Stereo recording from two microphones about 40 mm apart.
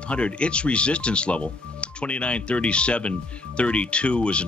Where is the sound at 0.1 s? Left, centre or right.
Left.